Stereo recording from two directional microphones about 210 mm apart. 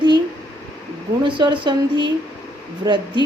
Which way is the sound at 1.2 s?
20° right (ahead or behind).